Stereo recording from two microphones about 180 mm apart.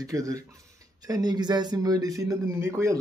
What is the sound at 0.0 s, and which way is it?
Speech, 20° right (ahead or behind).